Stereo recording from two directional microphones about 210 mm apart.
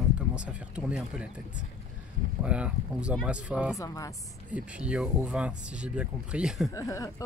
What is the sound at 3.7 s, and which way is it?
Speech, 15° left (ahead or behind).